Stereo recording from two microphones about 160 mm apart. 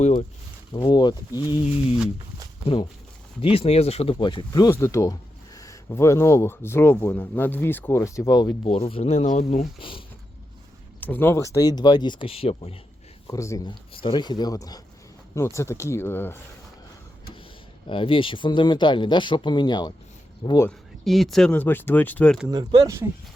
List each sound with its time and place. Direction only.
0.0 s speech: 50° left (ahead or behind)
0.7 s speech: 30° left (ahead or behind)
2.6 s speech: 35° left (ahead or behind)
8.6 s speech: 40° left (ahead or behind)
11.0 s speech: 15° left (ahead or behind); by 12.8 s 35° left (ahead or behind)
13.2 s speech: 20° left (ahead or behind)
17.8 s speech: 35° left (ahead or behind)
20.7 s speech: centre (ahead or behind)
22.4 s speech: 25° right (ahead or behind)